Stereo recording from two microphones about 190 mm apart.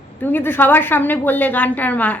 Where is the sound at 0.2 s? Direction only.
10° left (ahead or behind).